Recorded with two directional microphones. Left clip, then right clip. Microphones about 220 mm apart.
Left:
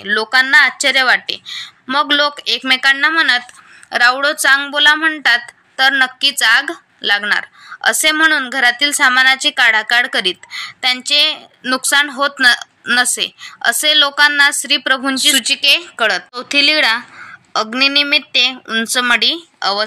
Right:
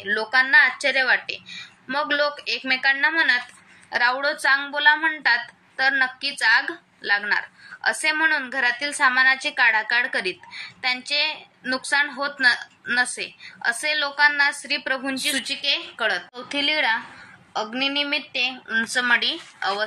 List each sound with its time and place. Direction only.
0.0 s a woman's voice: 55° left (ahead or behind)